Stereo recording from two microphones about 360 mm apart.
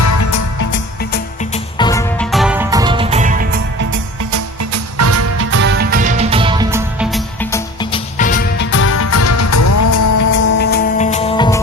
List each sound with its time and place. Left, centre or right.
0.0 s music: left
1.8 s music: centre; by 3.6 s right
4.3 s music: right; by 7.2 s centre
8.2 s music: left
10.6 s music: left